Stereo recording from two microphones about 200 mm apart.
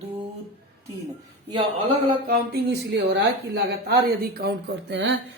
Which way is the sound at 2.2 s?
55° right (ahead or behind).